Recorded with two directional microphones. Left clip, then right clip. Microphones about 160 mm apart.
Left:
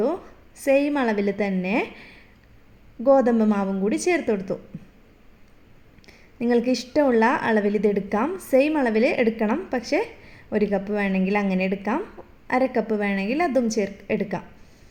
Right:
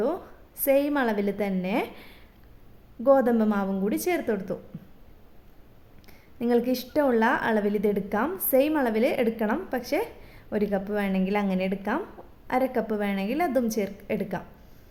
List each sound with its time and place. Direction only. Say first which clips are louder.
0.0 s a woman's voice: left 3 dB; 20° left (ahead or behind)
6.1 s a woman's voice: left 2 dB; 20° left (ahead or behind)